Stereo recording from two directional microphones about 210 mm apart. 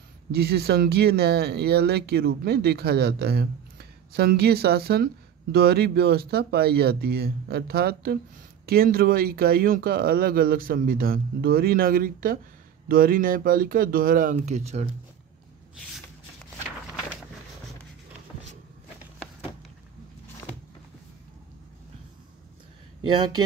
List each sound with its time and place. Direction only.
0.3 s speech: 50° right (ahead or behind); by 14.9 s 30° right (ahead or behind)
23.0 s speech: 20° right (ahead or behind)